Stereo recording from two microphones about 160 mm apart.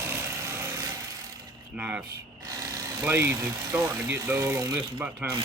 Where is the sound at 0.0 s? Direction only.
15° right (ahead or behind).